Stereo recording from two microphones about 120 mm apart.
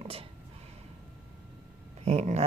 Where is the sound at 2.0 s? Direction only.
70° right (ahead or behind).